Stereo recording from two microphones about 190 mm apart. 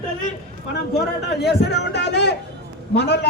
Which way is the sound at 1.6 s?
65° left (ahead or behind).